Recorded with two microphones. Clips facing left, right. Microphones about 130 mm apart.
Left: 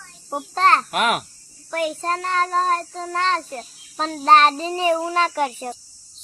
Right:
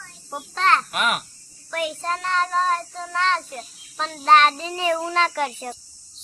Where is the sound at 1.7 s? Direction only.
40° left (ahead or behind).